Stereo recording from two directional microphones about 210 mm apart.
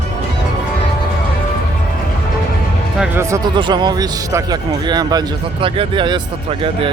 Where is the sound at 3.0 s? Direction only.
15° right (ahead or behind).